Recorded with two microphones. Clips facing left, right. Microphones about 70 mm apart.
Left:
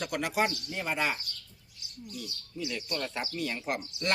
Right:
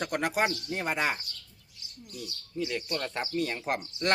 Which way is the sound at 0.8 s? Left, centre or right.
Right.